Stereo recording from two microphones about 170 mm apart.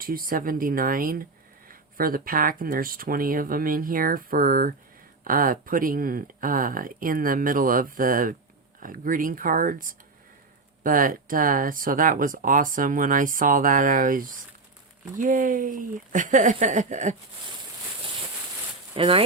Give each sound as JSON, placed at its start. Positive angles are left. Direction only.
{"t": 0.0, "sound": "speech", "side_deg": -60}
{"t": 18.9, "sound": "speech", "side_deg": -30}